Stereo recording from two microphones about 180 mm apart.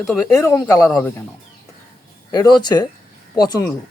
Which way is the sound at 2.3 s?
20° left (ahead or behind).